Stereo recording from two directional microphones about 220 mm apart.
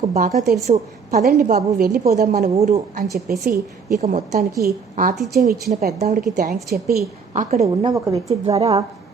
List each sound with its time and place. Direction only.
0.1 s a woman's voice: 30° right (ahead or behind)
2.0 s a woman's voice: 35° right (ahead or behind)
4.0 s a woman's voice: 35° right (ahead or behind)
6.0 s speech: 30° right (ahead or behind)
6.3 s a woman's voice: 45° right (ahead or behind)
7.3 s a woman's voice: 30° right (ahead or behind); by 8.2 s 15° right (ahead or behind)
8.3 s a woman's voice: 25° right (ahead or behind)